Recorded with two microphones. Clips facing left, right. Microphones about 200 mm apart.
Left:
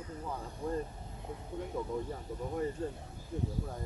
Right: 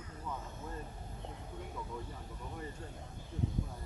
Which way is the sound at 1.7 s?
40° left (ahead or behind).